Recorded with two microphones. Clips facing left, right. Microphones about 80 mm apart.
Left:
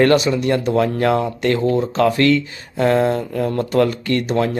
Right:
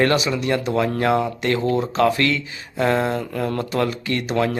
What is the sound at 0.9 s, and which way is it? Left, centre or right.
Speech, right.